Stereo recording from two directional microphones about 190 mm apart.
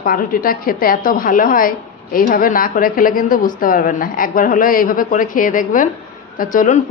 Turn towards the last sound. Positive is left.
turn(degrees=45)  # may be behind; listen again after turning